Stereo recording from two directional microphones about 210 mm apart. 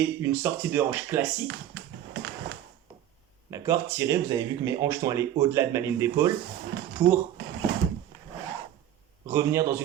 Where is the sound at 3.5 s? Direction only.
15° right (ahead or behind).